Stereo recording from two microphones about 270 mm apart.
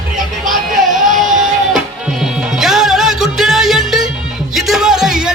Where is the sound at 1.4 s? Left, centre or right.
Centre.